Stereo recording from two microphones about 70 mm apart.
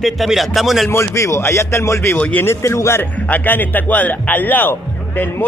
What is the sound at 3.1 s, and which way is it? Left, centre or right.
Speech, left.